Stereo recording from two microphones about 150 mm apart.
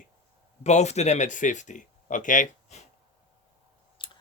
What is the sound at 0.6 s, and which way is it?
Speech, 50° left (ahead or behind).